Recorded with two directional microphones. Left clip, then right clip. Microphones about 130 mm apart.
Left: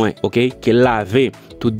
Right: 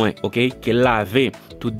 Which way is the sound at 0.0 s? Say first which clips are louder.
Left 3 dB; 40° left (ahead or behind).